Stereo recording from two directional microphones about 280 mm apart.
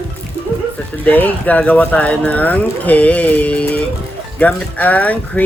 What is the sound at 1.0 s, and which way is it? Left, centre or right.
Speech, centre.